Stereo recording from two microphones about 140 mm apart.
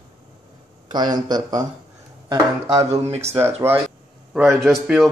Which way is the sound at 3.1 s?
45° right (ahead or behind).